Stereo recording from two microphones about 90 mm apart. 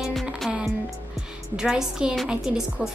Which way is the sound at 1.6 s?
5° right (ahead or behind).